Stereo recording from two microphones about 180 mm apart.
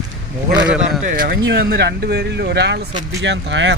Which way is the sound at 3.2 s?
85° right.